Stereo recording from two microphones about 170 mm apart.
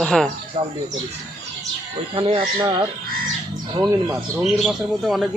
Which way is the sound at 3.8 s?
20° right (ahead or behind).